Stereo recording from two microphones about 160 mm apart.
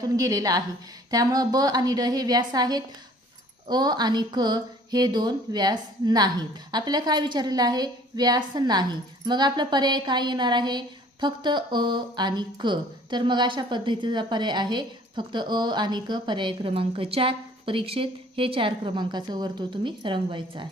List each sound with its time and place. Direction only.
0.0 s a woman's voice: 20° right (ahead or behind)